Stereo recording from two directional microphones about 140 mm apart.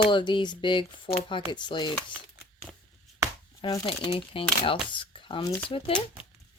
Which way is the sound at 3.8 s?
35° left (ahead or behind).